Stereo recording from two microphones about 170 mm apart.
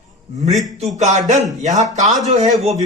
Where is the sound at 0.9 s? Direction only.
45° right (ahead or behind).